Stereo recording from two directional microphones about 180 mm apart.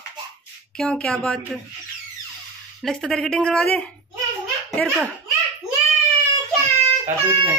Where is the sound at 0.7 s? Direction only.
5° left (ahead or behind).